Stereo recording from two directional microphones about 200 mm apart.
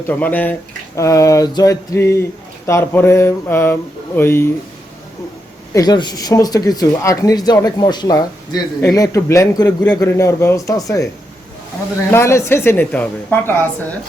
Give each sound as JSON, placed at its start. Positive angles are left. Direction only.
{"t": 0.1, "sound": "speech", "side_deg": 10}
{"t": 5.7, "sound": "speech", "side_deg": 20}
{"t": 12.1, "sound": "speech", "side_deg": 15}